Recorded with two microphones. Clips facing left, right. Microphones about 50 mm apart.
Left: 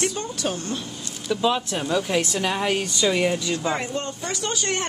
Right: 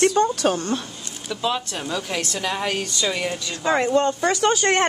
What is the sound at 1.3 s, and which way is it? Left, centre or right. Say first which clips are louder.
Speech: left 3 dB; centre.